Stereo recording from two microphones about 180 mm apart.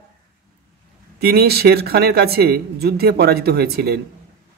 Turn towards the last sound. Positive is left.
turn(degrees=-60)  # may be behind; listen again after turning